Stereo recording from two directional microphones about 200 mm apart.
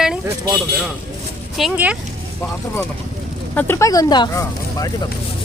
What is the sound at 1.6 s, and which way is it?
Speech, 5° right (ahead or behind).